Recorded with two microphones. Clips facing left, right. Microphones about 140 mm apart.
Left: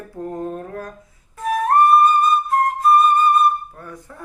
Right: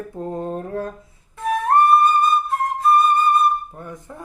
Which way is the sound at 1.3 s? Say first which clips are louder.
Left 1 dB; 25° right (ahead or behind).